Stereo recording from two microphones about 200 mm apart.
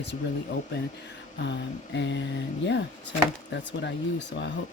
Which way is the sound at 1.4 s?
60° left (ahead or behind).